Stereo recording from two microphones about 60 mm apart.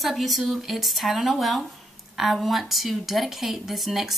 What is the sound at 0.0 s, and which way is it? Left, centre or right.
Speech, centre.